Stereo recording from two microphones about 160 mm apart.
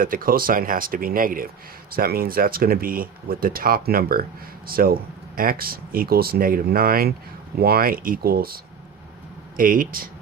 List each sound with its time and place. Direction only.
0.0 s speech: 60° right (ahead or behind)